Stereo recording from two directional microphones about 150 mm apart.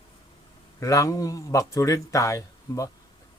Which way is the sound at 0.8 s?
20° left (ahead or behind).